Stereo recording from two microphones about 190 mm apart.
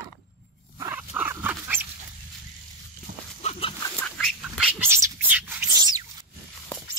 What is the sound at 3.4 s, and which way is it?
Dog, 30° left (ahead or behind).